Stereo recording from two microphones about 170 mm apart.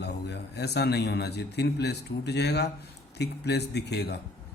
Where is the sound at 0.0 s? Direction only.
75° left (ahead or behind).